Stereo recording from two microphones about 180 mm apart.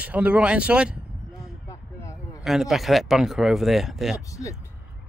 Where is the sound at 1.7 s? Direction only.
15° left (ahead or behind).